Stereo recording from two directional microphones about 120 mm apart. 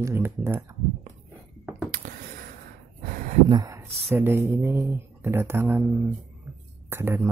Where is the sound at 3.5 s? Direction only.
30° right (ahead or behind).